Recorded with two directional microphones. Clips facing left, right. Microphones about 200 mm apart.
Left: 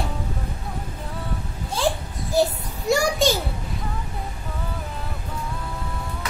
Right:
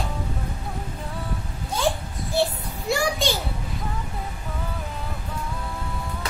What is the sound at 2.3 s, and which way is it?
Child singing, 40° left (ahead or behind).